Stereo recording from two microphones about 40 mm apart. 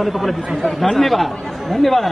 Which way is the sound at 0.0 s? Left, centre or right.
Centre.